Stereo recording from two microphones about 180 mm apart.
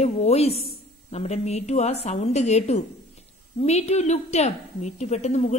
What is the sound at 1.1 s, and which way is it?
Speech, 35° left (ahead or behind).